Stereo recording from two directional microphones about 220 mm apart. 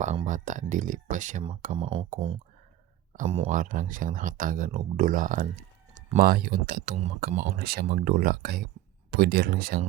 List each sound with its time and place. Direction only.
0.3 s speech: 35° right (ahead or behind)
3.5 s speech: 35° right (ahead or behind)